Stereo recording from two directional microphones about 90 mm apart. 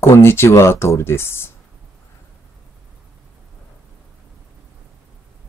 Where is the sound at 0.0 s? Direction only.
30° left (ahead or behind).